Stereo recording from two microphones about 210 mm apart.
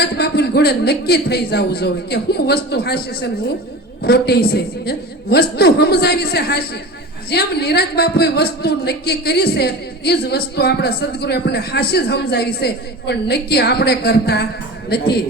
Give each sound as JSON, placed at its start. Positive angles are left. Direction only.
{"t": 0.0, "sound": "a man's voice", "side_deg": 50}